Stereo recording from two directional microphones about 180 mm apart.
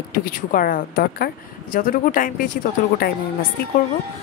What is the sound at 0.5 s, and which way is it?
A woman's voice, 50° left (ahead or behind).